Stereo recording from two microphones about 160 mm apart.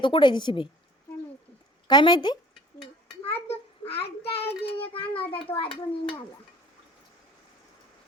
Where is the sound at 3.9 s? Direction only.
90° left.